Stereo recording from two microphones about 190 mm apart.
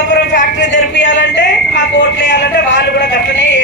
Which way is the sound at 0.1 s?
70° left (ahead or behind).